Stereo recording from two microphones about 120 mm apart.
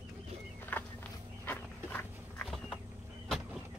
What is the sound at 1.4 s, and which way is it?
Dog, 15° left (ahead or behind).